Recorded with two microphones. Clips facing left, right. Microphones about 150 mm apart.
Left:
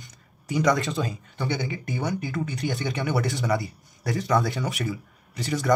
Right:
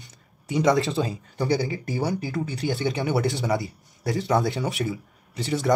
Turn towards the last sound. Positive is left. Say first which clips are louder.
# right 1 dB
turn(degrees=-25)  # may be behind; listen again after turning